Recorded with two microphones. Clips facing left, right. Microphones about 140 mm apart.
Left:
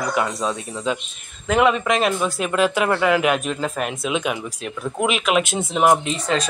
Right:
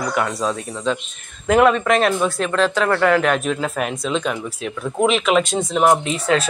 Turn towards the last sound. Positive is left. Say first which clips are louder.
# right 3 dB
turn(degrees=-10)  # may be behind; listen again after turning